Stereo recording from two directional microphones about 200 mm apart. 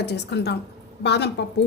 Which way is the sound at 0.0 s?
55° left (ahead or behind).